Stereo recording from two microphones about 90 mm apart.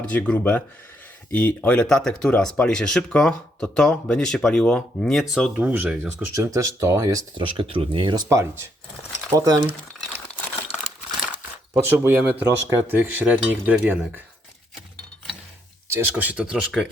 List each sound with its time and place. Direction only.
0.0 s speech: 15° left (ahead or behind)
5.5 s speech: 15° right (ahead or behind)
6.3 s speech: 35° right (ahead or behind)
7.3 s speech: 65° right (ahead or behind); by 9.6 s 45° right (ahead or behind)
11.2 s a sound: 15° right (ahead or behind)
12.7 s speech: 25° right (ahead or behind)
15.9 s speech: 25° right (ahead or behind); by 16.9 s 10° right (ahead or behind)